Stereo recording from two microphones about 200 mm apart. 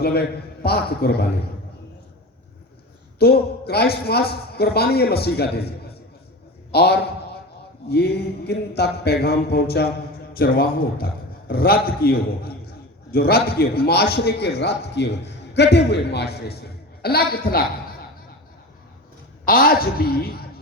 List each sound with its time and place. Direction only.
0.0 s a man's voice: 50° left (ahead or behind)
3.2 s a man's voice: 50° left (ahead or behind)
19.5 s a man's voice: 45° left (ahead or behind)